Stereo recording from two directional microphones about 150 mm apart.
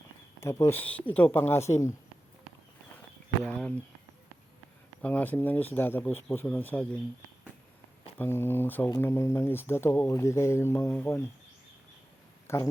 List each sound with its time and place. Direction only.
0.3 s speech: 20° left (ahead or behind)
3.4 s speech: 5° left (ahead or behind)
5.0 s speech: 10° left (ahead or behind)
8.2 s speech: 15° left (ahead or behind)
12.5 s speech: 15° left (ahead or behind)